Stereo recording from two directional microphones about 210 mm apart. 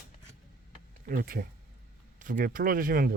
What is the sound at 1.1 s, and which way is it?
Speech, 45° right (ahead or behind).